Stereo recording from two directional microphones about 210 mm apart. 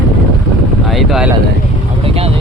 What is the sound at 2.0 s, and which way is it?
Vehicle, 30° right (ahead or behind).